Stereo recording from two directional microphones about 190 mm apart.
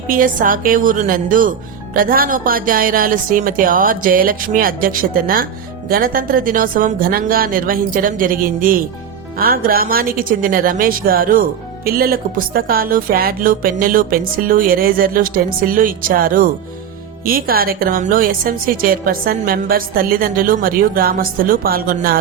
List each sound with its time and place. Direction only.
0.1 s speech: 45° right (ahead or behind)